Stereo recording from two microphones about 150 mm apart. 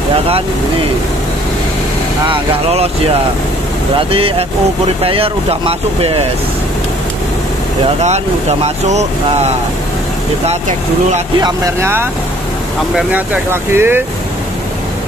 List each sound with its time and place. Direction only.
2.2 s speech: 40° right (ahead or behind)
4.1 s speech: 40° right (ahead or behind)
8.0 s speech: 50° right (ahead or behind)
11.4 s speech: 20° right (ahead or behind)